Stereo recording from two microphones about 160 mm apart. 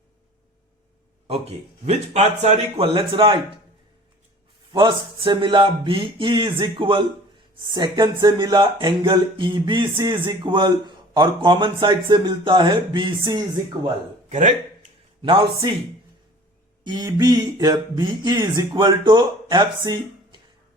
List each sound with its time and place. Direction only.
1.3 s speech: 40° right (ahead or behind)
4.7 s speech: 30° right (ahead or behind)
14.3 s speech: 50° right (ahead or behind)
15.2 s speech: 30° right (ahead or behind)
16.8 s speech: 25° right (ahead or behind)